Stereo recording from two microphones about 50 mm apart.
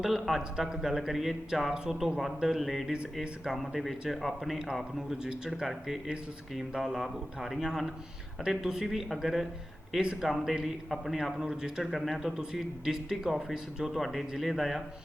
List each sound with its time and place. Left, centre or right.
0.0 s speech: centre
4.9 s speech: centre
10.0 s speech: centre
10.2 s speech: centre
11.9 s speech: centre
14.0 s speech: centre